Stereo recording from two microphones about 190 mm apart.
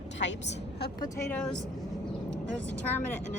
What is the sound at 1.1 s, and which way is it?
Speech, 10° left (ahead or behind).